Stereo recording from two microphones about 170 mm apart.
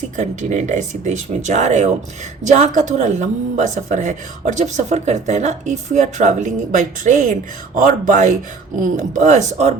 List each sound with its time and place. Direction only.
0.2 s speech: 45° right (ahead or behind)